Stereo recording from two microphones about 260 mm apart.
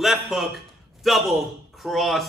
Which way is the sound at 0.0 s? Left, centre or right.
Centre.